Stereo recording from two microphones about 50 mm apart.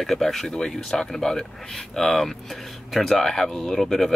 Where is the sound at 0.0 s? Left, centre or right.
Centre.